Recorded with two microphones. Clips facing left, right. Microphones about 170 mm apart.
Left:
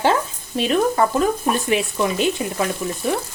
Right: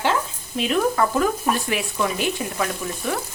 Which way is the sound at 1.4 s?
25° left (ahead or behind).